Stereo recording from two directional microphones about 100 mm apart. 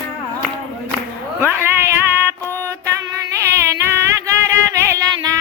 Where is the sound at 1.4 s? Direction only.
25° right (ahead or behind).